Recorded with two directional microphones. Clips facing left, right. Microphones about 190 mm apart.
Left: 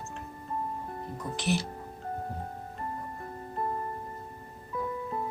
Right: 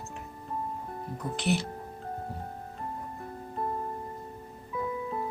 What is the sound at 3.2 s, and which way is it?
Music, centre (ahead or behind).